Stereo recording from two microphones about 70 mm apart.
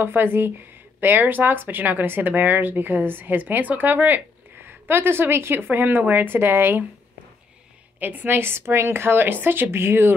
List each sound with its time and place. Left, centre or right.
0.0 s speech: right
8.0 s speech: right